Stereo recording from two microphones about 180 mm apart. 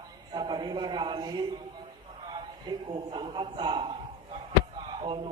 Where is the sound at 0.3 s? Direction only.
25° right (ahead or behind).